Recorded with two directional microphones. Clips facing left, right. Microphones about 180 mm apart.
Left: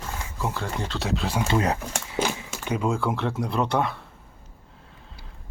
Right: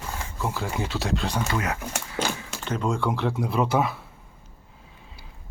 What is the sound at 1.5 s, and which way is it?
Speech, 30° left (ahead or behind).